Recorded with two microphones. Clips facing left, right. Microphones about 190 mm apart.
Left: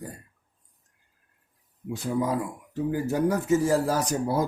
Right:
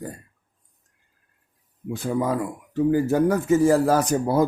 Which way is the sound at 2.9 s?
60° right (ahead or behind).